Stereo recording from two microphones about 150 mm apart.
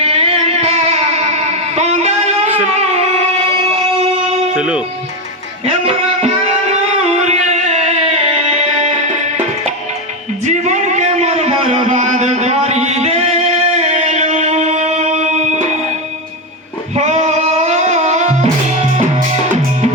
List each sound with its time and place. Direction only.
0.0 s music: 40° right (ahead or behind)
1.7 s a sound: 45° right (ahead or behind)
4.5 s speech: 5° right (ahead or behind)
5.6 s music: 40° right (ahead or behind)
10.4 s a sound: 50° right (ahead or behind)
16.9 s music: 45° right (ahead or behind)